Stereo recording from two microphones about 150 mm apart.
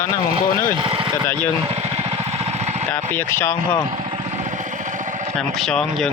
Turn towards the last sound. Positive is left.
turn(degrees=5)  # may be behind; listen again after turning